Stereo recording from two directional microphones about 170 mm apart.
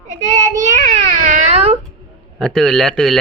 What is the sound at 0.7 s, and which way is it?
Speech, 45° right (ahead or behind).